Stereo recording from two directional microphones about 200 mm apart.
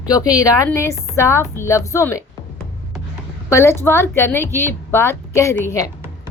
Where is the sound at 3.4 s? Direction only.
15° left (ahead or behind).